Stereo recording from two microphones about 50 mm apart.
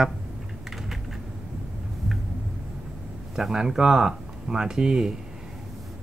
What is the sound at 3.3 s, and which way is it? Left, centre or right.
Speech, centre.